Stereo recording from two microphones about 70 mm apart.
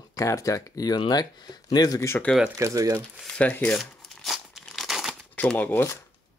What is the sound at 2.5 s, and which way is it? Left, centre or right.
Speech, right.